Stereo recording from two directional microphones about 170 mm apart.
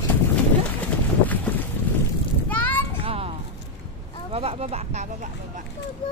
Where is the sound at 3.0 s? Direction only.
35° right (ahead or behind).